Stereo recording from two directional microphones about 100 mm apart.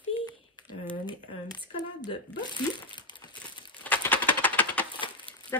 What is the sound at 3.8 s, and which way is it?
Typewriter, 15° left (ahead or behind).